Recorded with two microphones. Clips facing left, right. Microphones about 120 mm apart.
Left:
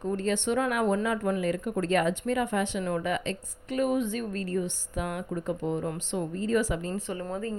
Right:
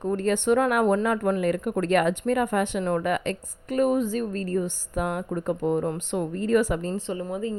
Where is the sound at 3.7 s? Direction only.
40° right (ahead or behind).